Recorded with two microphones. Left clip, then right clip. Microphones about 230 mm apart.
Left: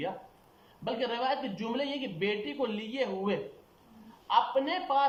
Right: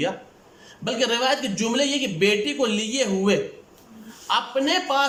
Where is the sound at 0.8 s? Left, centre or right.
Right.